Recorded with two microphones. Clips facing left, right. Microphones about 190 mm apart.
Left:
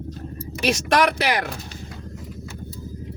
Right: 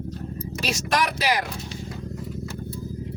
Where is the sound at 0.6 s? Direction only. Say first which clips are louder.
Left 6 dB; 60° left (ahead or behind).